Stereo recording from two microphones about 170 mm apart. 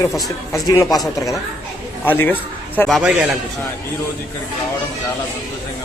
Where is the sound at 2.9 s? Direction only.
Centre (ahead or behind).